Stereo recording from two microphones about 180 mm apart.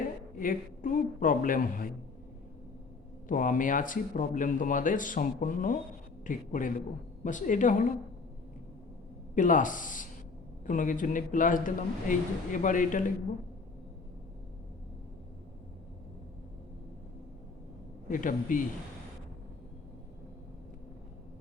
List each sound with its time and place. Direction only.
0.3 s speech: 50° left (ahead or behind)
3.2 s speech: 45° left (ahead or behind)
9.3 s speech: 45° left (ahead or behind)
18.1 s speech: 45° left (ahead or behind)